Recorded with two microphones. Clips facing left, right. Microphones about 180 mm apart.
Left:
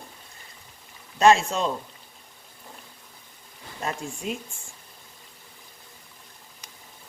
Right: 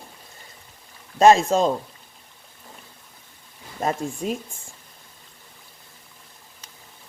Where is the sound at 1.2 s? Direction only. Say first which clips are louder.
Right 4 dB; 40° right (ahead or behind).